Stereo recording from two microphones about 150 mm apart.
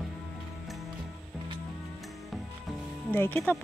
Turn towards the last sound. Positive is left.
turn(degrees=10)  # may be behind; listen again after turning